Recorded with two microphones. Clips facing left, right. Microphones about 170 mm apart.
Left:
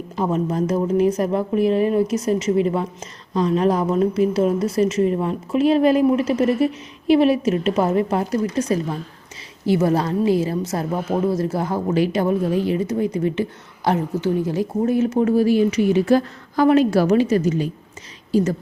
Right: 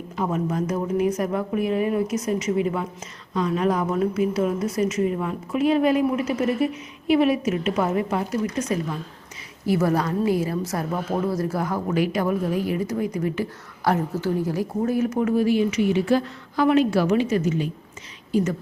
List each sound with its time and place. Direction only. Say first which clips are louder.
0.3 s a woman's voice: left 4 dB; 30° left (ahead or behind)